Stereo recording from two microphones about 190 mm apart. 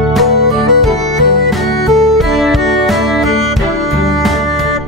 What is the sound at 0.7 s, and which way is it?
Music, centre (ahead or behind).